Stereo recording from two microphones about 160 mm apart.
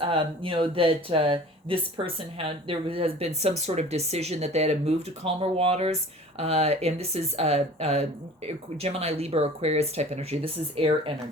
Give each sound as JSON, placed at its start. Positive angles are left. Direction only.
{"t": 0.0, "sound": "speech", "side_deg": -35}